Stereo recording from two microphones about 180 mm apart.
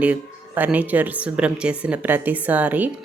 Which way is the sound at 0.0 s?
10° right (ahead or behind).